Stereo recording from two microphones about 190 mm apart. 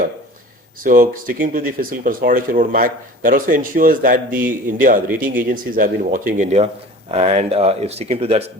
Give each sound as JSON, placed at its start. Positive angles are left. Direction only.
{"t": 0.9, "sound": "speech", "side_deg": -45}
{"t": 4.3, "sound": "speech", "side_deg": -10}
{"t": 4.8, "sound": "speech", "side_deg": -45}